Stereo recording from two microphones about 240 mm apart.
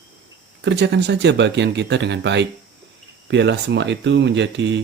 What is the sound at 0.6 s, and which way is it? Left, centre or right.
Speech, right.